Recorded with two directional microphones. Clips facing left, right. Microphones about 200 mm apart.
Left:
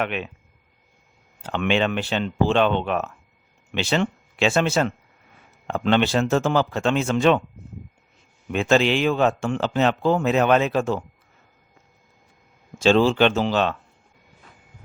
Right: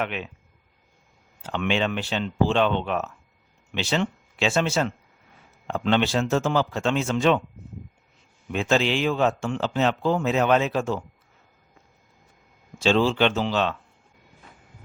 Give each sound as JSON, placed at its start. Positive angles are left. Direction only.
{"t": 0.0, "sound": "a man's voice", "side_deg": 60}
{"t": 1.5, "sound": "a man's voice", "side_deg": 60}
{"t": 8.5, "sound": "a man's voice", "side_deg": 60}
{"t": 12.8, "sound": "speech", "side_deg": 45}